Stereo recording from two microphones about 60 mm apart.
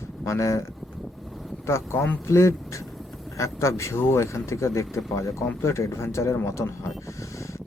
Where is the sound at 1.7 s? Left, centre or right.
Left.